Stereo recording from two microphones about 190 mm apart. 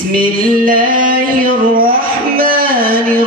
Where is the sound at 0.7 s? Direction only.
45° right (ahead or behind).